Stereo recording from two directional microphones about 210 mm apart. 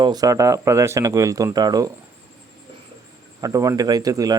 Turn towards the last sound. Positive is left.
turn(degrees=-15)  # may be behind; listen again after turning